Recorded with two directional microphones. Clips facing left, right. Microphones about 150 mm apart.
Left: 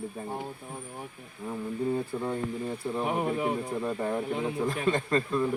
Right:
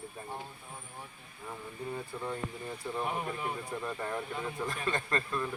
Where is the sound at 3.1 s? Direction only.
60° left (ahead or behind).